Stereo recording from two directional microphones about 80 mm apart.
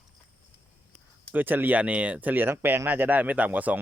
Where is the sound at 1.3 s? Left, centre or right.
Right.